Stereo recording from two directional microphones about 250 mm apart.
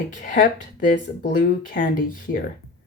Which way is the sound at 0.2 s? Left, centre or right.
Left.